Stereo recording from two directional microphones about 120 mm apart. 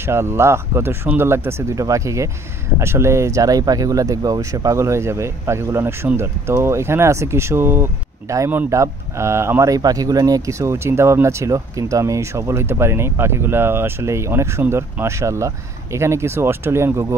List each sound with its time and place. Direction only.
0.0 s speech: 20° right (ahead or behind)